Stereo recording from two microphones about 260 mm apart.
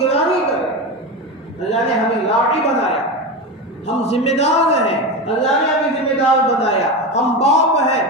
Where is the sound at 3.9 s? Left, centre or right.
Left.